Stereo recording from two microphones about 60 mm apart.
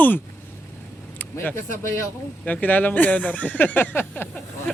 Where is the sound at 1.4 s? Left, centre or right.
Left.